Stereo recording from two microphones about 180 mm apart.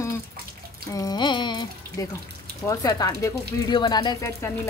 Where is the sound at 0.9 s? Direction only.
20° left (ahead or behind).